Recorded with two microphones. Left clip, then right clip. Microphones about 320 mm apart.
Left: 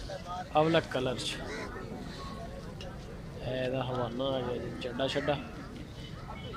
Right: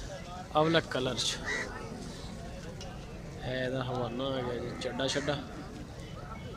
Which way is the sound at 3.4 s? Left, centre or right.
Centre.